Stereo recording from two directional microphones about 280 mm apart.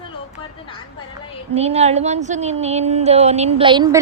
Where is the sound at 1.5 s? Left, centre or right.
Right.